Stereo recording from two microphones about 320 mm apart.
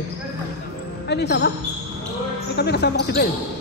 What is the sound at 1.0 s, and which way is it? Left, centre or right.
Speech, left.